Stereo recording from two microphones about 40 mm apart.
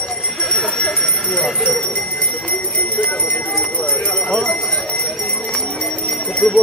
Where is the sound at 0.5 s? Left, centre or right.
Centre.